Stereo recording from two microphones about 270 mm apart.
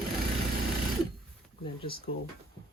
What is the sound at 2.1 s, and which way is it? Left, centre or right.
Speech, left.